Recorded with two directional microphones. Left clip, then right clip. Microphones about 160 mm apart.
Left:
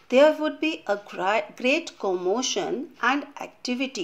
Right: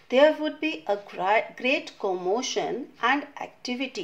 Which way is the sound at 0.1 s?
30° left (ahead or behind).